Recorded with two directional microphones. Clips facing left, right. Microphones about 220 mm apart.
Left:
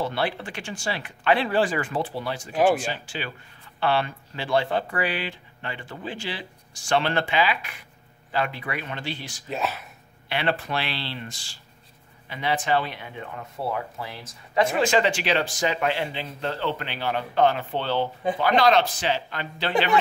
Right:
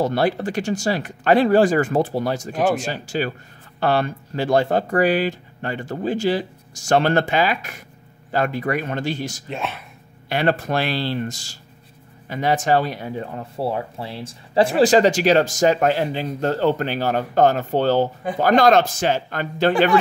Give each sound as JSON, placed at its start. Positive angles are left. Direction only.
{"t": 0.0, "sound": "speech", "side_deg": -40}
{"t": 9.5, "sound": "speech", "side_deg": 5}
{"t": 10.2, "sound": "speech", "side_deg": -45}